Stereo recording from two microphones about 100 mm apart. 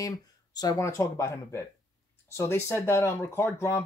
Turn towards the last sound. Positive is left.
turn(degrees=30)  # may be behind; listen again after turning